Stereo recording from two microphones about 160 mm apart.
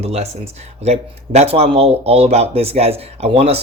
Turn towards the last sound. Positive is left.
turn(degrees=-40)  # may be behind; listen again after turning